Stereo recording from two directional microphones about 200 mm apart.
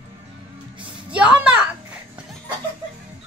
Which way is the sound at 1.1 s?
5° right (ahead or behind).